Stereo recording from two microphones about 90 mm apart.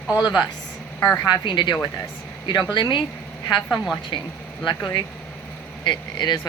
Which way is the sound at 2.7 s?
60° left (ahead or behind).